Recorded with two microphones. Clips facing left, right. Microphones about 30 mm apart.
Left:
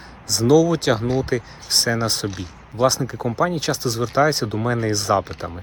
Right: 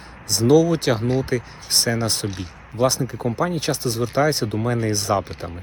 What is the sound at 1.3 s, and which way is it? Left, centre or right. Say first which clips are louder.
Speech: left 1 dB; left.